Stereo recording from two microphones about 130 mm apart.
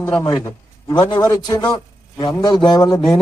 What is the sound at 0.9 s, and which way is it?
A man's voice, 30° left (ahead or behind).